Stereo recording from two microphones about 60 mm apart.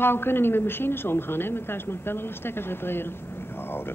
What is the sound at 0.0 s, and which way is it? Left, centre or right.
Speech, left.